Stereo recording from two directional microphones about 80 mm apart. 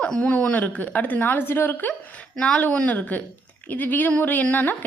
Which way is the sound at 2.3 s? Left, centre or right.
Centre.